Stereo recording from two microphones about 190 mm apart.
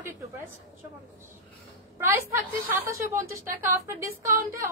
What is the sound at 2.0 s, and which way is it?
A woman's voice, 15° right (ahead or behind).